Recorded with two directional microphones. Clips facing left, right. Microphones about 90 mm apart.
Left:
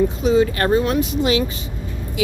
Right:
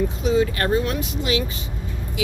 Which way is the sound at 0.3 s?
35° left (ahead or behind).